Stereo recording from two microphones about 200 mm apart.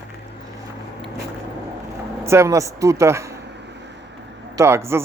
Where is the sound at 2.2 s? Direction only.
15° right (ahead or behind).